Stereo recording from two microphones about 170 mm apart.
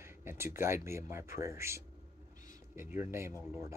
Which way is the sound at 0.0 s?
15° right (ahead or behind).